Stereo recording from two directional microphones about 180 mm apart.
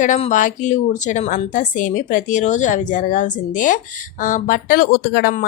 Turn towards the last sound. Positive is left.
turn(degrees=55)  # may be behind; listen again after turning